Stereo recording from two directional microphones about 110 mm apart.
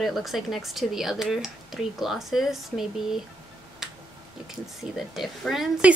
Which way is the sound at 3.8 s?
5° right (ahead or behind).